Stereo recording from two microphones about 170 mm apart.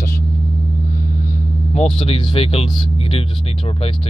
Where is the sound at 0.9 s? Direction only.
50° left (ahead or behind).